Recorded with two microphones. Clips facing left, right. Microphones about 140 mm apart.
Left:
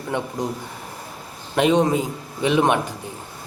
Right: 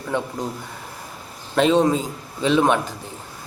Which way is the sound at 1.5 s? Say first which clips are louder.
Right 1 dB; 15° left (ahead or behind).